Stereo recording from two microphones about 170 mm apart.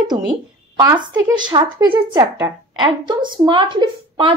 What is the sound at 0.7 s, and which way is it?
A woman's voice, 25° right (ahead or behind).